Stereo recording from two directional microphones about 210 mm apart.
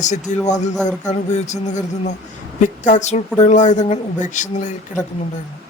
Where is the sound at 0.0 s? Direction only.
35° left (ahead or behind).